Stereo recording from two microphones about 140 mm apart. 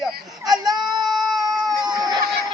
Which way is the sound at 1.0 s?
Centre (ahead or behind).